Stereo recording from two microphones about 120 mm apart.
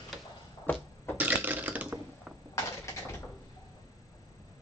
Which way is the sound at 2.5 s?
25° left (ahead or behind).